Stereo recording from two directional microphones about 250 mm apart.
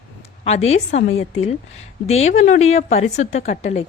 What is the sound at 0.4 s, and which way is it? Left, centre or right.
A woman's voice, left.